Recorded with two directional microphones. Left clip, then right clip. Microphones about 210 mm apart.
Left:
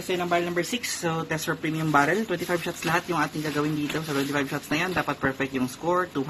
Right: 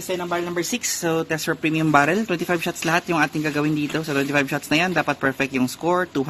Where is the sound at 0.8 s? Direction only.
60° right (ahead or behind).